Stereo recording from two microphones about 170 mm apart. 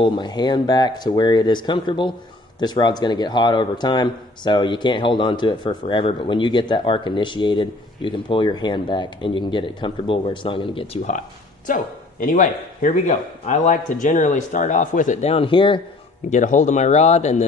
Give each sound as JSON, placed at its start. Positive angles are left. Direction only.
{"t": 0.0, "sound": "speech", "side_deg": 25}
{"t": 11.0, "sound": "speech", "side_deg": 45}
{"t": 16.3, "sound": "speech", "side_deg": 45}